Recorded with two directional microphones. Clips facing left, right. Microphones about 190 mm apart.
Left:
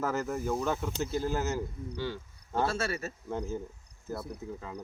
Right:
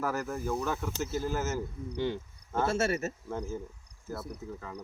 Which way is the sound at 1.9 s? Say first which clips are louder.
Right 4 dB; 20° right (ahead or behind).